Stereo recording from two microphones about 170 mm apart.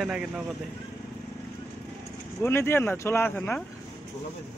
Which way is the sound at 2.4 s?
15° left (ahead or behind).